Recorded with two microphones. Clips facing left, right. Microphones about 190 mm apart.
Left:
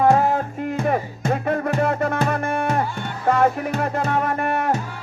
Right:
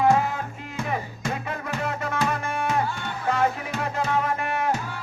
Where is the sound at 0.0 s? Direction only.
45° left (ahead or behind).